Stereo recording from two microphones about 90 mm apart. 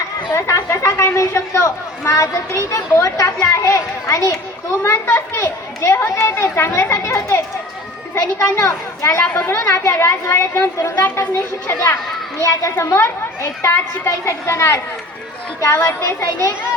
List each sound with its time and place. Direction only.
0.3 s a child's voice: 30° left (ahead or behind)
9.2 s a woman's voice: 15° left (ahead or behind)
9.5 s a child's voice: 30° left (ahead or behind)